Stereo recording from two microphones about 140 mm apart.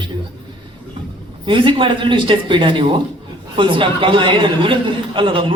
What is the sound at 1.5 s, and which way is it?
A woman's voice, 35° right (ahead or behind).